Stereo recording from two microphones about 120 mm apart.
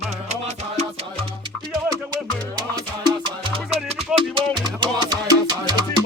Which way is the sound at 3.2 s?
45° right (ahead or behind).